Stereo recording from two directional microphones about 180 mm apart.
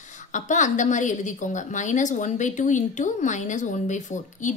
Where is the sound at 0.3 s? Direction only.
45° left (ahead or behind).